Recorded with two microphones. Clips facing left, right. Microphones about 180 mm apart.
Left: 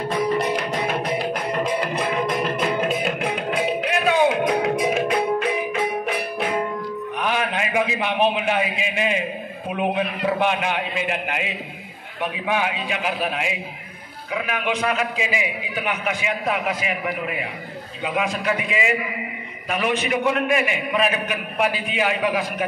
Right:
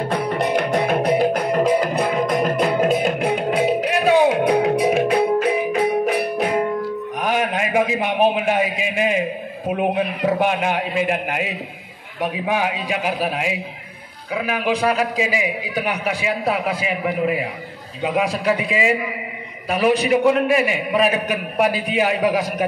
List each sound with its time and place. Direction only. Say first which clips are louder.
0.1 s music: even; 65° right (ahead or behind); by 6.4 s 40° right (ahead or behind)
7.2 s a sound: right 3 dB; 40° right (ahead or behind)
9.7 s a man's voice: right 3 dB; 40° right (ahead or behind)